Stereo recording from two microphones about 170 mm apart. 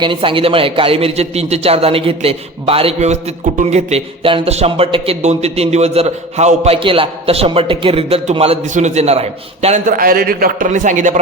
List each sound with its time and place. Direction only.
0.0 s a man's voice: 30° right (ahead or behind)
10.0 s a man's voice: 60° right (ahead or behind)